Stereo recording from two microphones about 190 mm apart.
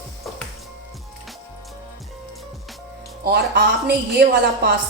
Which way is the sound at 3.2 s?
60° right (ahead or behind).